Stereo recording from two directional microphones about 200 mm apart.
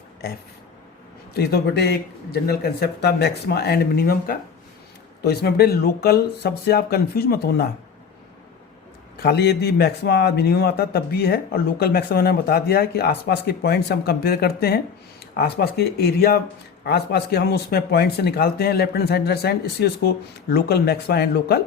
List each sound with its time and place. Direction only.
1.3 s a man's voice: 50° left (ahead or behind)
9.1 s a man's voice: 50° left (ahead or behind)